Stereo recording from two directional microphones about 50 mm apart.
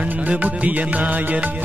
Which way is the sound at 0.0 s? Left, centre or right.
Right.